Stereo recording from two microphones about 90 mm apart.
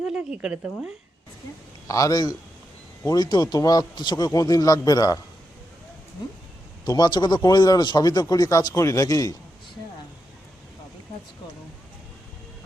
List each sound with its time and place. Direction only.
0.0 s speech: 10° right (ahead or behind)
1.9 s speech: 40° left (ahead or behind)
6.8 s speech: 50° left (ahead or behind)